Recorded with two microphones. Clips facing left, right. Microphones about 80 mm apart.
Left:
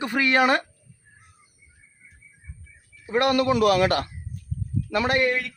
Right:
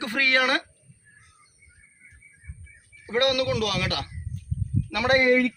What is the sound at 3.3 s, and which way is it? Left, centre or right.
Speech, left.